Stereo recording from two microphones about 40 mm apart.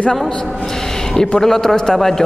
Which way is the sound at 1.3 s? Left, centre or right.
Centre.